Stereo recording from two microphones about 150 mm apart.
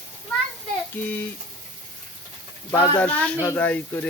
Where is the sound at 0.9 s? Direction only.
10° left (ahead or behind).